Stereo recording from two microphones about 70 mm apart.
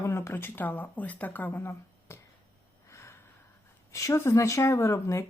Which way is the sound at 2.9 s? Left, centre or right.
Left.